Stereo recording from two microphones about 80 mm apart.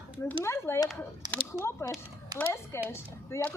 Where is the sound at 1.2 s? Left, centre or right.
Right.